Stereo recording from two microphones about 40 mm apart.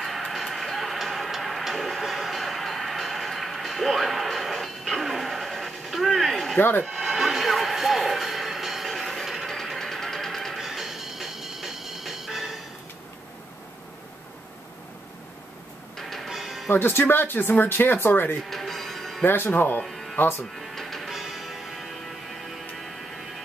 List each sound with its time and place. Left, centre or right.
0.0 s music: centre
8.9 s train: centre
9.8 s a sound: centre
10.6 s music: centre
16.0 s music: centre
16.3 s music: centre
16.7 s speech: left
18.5 s music: centre
19.2 s speech: left
19.5 s speech: left
19.8 s music: centre
20.2 s speech: left
20.7 s music: centre